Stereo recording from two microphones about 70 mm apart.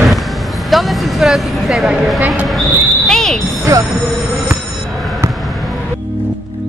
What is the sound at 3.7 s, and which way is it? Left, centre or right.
Speech, right.